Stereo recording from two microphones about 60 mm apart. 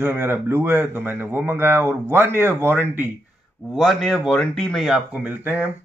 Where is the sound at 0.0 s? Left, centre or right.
Right.